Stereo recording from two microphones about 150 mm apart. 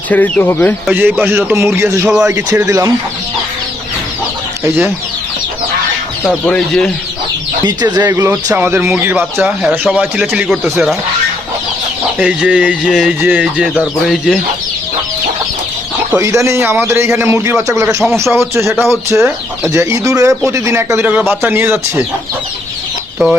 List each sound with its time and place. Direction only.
0.1 s speech: 10° left (ahead or behind)
0.9 s speech: 15° right (ahead or behind)
6.2 s speech: 5° left (ahead or behind)
7.6 s speech: 25° right (ahead or behind); by 10.9 s centre (ahead or behind)
12.2 s speech: 5° right (ahead or behind)
16.1 s speech: 20° right (ahead or behind)
23.2 s speech: centre (ahead or behind)